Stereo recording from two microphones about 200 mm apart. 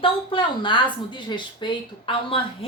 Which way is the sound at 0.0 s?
25° left (ahead or behind).